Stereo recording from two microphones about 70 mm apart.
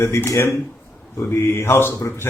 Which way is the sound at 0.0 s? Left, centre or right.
Left.